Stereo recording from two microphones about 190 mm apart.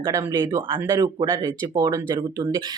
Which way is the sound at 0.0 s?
20° right (ahead or behind).